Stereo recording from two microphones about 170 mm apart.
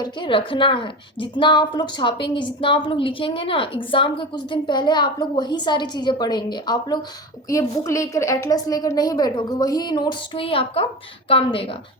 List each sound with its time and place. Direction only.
0.0 s a woman's voice: 30° left (ahead or behind)